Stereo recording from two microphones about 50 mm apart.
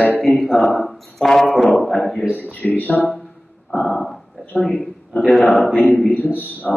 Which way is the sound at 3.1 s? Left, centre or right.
Centre.